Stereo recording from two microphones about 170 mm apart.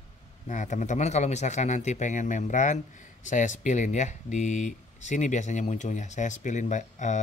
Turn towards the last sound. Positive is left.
turn(degrees=45)  # may be behind; listen again after turning